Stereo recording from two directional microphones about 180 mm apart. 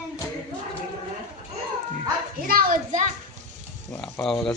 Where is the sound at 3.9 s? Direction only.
5° left (ahead or behind).